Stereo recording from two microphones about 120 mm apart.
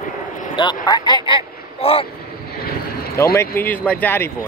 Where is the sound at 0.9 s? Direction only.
35° left (ahead or behind).